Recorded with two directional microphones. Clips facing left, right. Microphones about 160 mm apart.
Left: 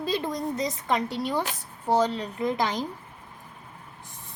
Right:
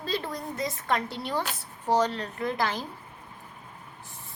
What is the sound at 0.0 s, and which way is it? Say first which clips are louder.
A woman's voice: left 4 dB; 15° left (ahead or behind).